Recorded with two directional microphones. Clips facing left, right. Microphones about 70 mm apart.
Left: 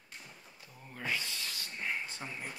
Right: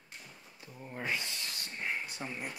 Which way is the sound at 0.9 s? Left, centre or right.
Right.